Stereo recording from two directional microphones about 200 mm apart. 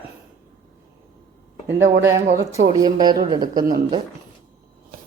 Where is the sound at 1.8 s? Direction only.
70° right (ahead or behind).